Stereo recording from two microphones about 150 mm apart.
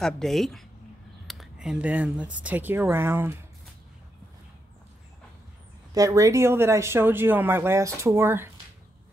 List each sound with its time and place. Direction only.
0.0 s speech: centre (ahead or behind); by 3.3 s 15° right (ahead or behind)
5.9 s speech: 20° right (ahead or behind)